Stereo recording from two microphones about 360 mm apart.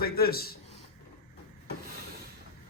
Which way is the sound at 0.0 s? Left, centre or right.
Left.